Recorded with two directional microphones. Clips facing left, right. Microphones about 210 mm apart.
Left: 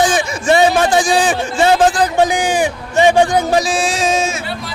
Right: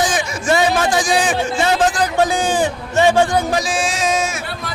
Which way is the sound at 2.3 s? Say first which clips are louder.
Left 1 dB; 15° left (ahead or behind).